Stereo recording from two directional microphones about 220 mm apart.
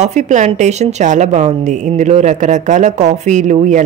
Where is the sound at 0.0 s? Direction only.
30° right (ahead or behind).